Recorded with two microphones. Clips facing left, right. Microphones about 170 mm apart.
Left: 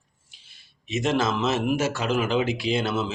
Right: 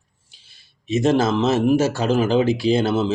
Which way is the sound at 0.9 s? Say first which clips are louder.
Right 6 dB; 35° right (ahead or behind).